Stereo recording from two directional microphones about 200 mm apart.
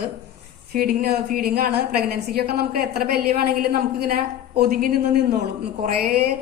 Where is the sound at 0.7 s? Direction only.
50° right (ahead or behind).